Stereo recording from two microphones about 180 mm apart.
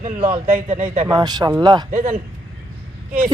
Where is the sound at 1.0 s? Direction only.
20° right (ahead or behind).